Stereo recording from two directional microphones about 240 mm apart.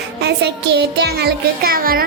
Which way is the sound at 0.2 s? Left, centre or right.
Right.